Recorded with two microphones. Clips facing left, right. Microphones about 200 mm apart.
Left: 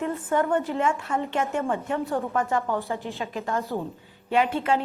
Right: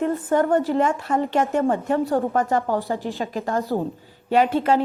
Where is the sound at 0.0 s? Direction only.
35° right (ahead or behind).